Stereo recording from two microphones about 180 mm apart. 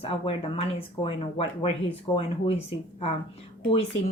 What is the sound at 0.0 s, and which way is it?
Speech, 30° left (ahead or behind).